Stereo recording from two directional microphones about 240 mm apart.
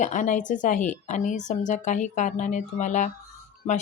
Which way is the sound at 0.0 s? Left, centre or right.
Left.